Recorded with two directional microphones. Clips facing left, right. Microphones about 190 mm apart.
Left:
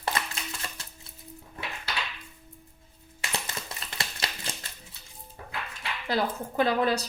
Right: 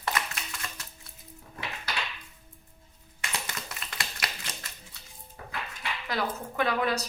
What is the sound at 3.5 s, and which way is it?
Typewriter, 30° left (ahead or behind).